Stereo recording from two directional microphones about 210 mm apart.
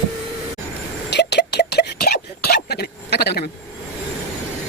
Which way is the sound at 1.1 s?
55° left (ahead or behind).